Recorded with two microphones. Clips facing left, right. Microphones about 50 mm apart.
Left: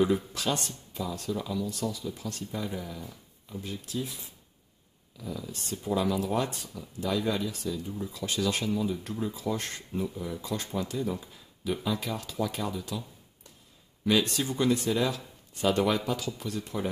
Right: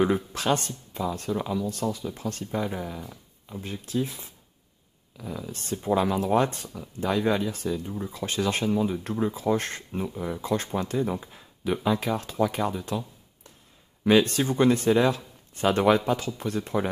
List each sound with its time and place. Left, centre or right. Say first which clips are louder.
0.0 s speech: right 2 dB; right
14.0 s speech: right 6 dB; right